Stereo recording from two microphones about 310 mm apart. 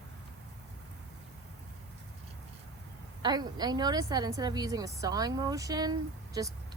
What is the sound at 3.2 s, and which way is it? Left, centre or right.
A woman's voice, centre.